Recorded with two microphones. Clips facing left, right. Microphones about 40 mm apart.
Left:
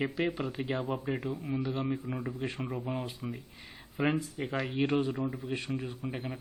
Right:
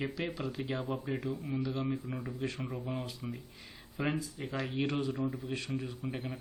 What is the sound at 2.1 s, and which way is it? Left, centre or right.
Speech, centre.